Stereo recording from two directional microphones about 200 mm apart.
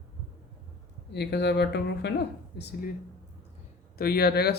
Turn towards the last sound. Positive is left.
turn(degrees=55)  # may be behind; listen again after turning